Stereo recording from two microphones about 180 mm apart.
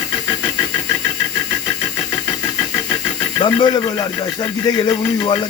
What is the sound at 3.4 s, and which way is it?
Speech, 25° left (ahead or behind).